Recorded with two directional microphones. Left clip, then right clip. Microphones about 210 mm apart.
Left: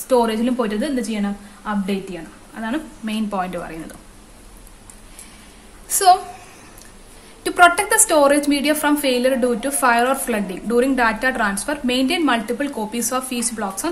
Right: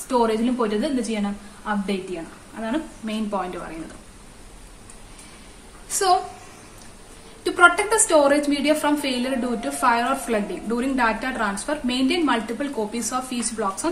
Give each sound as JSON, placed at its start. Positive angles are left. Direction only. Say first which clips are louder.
{"t": 0.1, "sound": "a woman's voice", "louder": "left 3 dB", "side_deg": 50}
{"t": 5.9, "sound": "a woman's voice", "louder": "left 7 dB", "side_deg": 50}
{"t": 7.4, "sound": "a woman's voice", "louder": "left 3 dB", "side_deg": 50}